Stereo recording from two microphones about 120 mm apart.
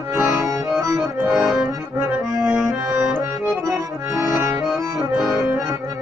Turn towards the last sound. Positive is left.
turn(degrees=0)  # may be behind; listen again after turning